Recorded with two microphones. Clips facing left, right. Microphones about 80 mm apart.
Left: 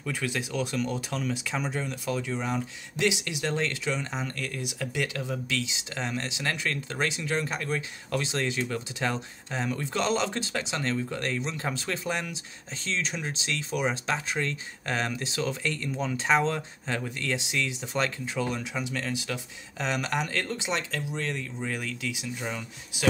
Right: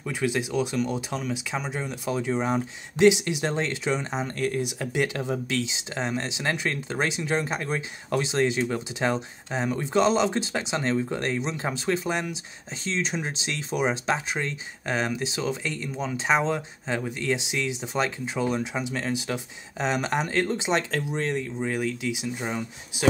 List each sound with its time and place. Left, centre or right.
0.0 s speech: centre
20.7 s speech: right
21.3 s speech: centre